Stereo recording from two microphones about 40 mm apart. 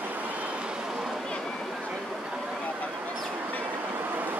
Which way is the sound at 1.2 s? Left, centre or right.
Centre.